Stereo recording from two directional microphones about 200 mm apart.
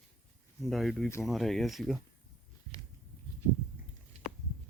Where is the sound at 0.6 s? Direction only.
Centre (ahead or behind).